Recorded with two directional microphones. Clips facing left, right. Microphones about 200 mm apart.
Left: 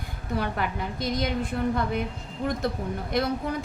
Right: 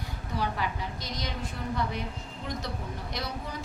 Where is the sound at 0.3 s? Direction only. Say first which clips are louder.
Left 3 dB; 55° left (ahead or behind).